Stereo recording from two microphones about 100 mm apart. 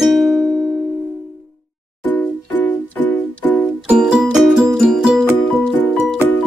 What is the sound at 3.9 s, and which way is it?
Music, 10° right (ahead or behind).